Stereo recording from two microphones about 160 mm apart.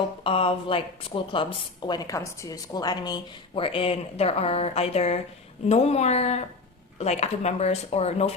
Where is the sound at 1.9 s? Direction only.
25° left (ahead or behind).